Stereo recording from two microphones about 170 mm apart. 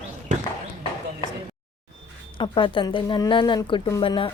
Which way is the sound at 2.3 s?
30° left (ahead or behind).